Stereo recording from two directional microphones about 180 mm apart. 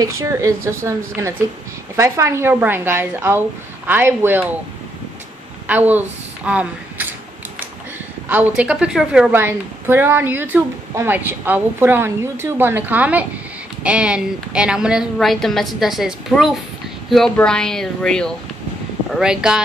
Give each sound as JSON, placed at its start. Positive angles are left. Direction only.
{"t": 0.0, "sound": "a woman's voice", "side_deg": -20}
{"t": 5.7, "sound": "a woman's voice", "side_deg": -10}
{"t": 8.3, "sound": "a woman's voice", "side_deg": -5}